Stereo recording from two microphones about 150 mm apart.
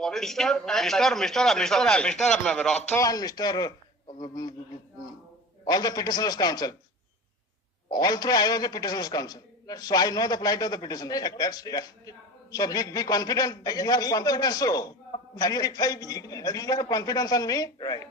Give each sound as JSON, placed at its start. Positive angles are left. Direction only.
{"t": 0.0, "sound": "a man's voice", "side_deg": 0}
{"t": 2.9, "sound": "a man's voice", "side_deg": 25}
{"t": 5.6, "sound": "a man's voice", "side_deg": 25}
{"t": 7.9, "sound": "a man's voice", "side_deg": 25}